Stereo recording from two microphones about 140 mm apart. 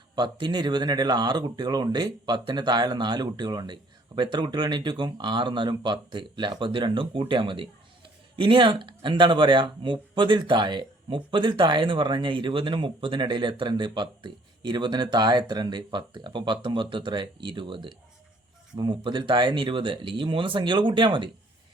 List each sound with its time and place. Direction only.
0.2 s speech: 30° right (ahead or behind)